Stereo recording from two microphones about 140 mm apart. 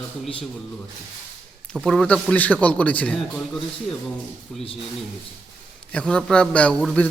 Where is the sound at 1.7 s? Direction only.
Centre (ahead or behind).